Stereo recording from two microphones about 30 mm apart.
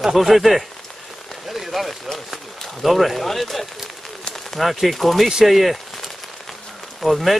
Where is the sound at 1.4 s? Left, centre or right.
Centre.